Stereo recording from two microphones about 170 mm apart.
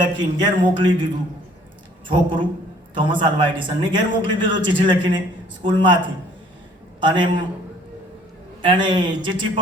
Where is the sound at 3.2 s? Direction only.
30° right (ahead or behind).